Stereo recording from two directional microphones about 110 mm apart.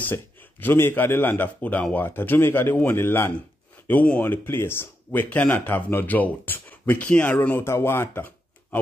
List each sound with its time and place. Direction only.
0.0 s speech: 15° left (ahead or behind)